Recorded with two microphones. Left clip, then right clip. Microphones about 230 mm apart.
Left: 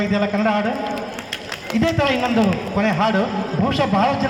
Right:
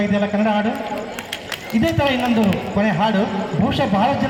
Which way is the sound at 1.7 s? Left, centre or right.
Left.